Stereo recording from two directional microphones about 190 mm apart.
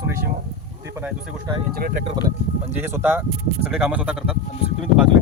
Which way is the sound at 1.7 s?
50° right (ahead or behind).